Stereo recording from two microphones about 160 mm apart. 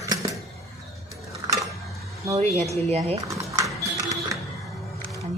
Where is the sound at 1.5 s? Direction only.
20° left (ahead or behind).